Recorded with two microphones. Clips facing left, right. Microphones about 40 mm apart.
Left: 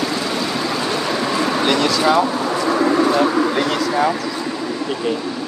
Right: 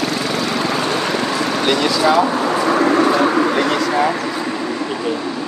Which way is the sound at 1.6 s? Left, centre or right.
Centre.